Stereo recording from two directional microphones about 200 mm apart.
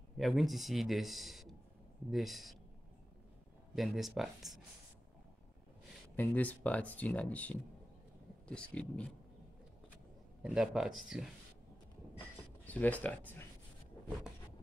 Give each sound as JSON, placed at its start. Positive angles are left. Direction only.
{"t": 0.2, "sound": "speech", "side_deg": 0}
{"t": 3.7, "sound": "speech", "side_deg": 0}
{"t": 6.1, "sound": "speech", "side_deg": 10}
{"t": 10.4, "sound": "speech", "side_deg": -5}
{"t": 12.6, "sound": "speech", "side_deg": 5}